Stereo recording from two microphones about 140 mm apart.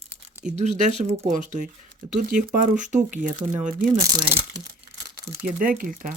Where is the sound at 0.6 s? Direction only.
55° right (ahead or behind).